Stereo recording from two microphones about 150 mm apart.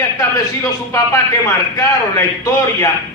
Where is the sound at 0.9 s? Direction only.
20° left (ahead or behind).